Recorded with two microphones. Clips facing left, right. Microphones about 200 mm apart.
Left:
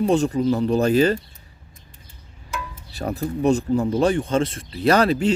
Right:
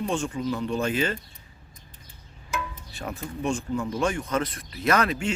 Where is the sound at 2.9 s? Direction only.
35° left (ahead or behind).